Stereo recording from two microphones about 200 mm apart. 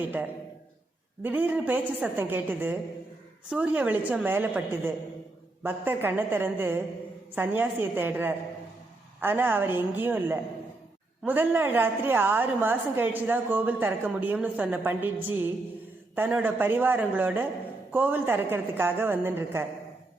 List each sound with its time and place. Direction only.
1.2 s a woman's voice: 10° right (ahead or behind)
16.1 s a woman's voice: 10° right (ahead or behind)